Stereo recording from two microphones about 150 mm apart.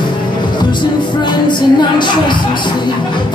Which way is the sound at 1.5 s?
30° left (ahead or behind).